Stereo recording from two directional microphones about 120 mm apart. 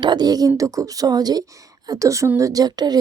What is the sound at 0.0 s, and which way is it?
Speech, 35° right (ahead or behind).